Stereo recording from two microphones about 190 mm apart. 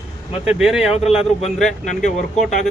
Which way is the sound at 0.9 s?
30° left (ahead or behind).